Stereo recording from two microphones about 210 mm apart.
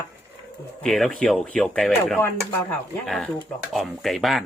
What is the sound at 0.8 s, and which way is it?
Speech, centre (ahead or behind).